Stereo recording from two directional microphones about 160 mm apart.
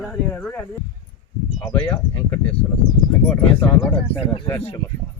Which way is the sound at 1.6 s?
10° left (ahead or behind).